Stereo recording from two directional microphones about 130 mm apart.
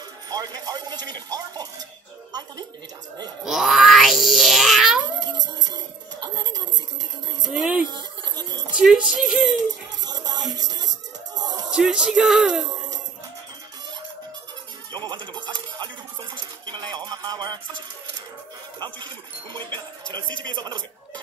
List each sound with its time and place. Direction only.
0.3 s speech: 30° right (ahead or behind)
3.4 s a sound: centre (ahead or behind)
6.2 s speech: 30° right (ahead or behind)
7.5 s speech: 10° right (ahead or behind)
8.4 s speech: 30° right (ahead or behind)
8.7 s speech: 10° right (ahead or behind)
9.1 s a sound: 5° right (ahead or behind)
9.7 s speech: 30° right (ahead or behind)
11.3 s music: 30° right (ahead or behind)
11.7 s speech: 5° right (ahead or behind)
14.9 s a sound: 35° right (ahead or behind)
18.8 s speech: 35° right (ahead or behind)